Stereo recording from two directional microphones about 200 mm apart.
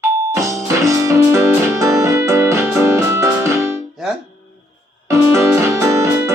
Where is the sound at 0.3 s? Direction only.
15° right (ahead or behind).